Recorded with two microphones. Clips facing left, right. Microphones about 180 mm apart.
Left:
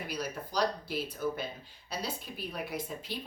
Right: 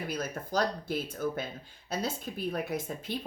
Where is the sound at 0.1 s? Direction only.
50° right (ahead or behind).